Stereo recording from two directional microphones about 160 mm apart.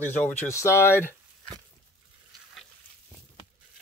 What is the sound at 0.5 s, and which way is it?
Speech, 15° left (ahead or behind).